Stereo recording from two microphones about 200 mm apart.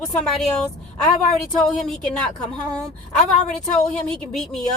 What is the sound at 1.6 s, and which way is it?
A woman's voice, 5° left (ahead or behind).